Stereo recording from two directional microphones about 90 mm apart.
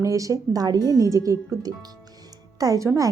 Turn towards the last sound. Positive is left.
turn(degrees=-40)  # may be behind; listen again after turning